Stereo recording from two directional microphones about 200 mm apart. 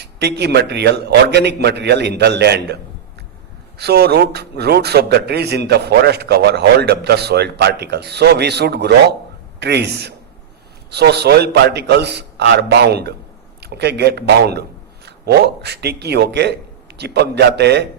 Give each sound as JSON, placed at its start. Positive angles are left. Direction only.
{"t": 0.0, "sound": "a man's voice", "side_deg": -55}
{"t": 3.8, "sound": "a man's voice", "side_deg": -55}